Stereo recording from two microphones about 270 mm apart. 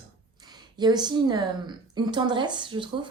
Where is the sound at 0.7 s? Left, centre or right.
Centre.